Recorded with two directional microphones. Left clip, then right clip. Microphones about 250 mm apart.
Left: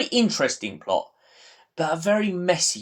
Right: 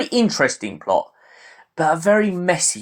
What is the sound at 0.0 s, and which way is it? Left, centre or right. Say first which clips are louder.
Speech: right 4 dB; centre.